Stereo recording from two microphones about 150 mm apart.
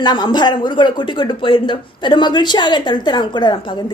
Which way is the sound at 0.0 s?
30° left (ahead or behind).